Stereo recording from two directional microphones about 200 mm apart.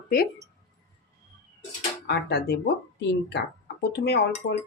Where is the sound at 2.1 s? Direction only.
55° left (ahead or behind).